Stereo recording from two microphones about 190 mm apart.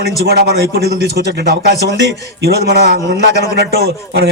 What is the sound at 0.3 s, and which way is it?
A man's voice, 55° right (ahead or behind).